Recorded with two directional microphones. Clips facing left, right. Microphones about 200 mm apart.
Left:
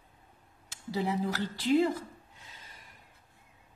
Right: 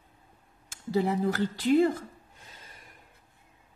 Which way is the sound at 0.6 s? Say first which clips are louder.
Right 5 dB; 50° right (ahead or behind).